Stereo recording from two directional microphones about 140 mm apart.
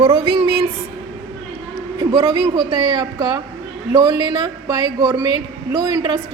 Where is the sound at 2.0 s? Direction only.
35° right (ahead or behind).